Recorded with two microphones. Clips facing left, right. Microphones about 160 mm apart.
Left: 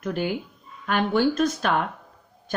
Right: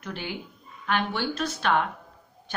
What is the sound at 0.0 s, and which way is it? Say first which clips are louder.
Speech: left 8 dB; 45° left (ahead or behind).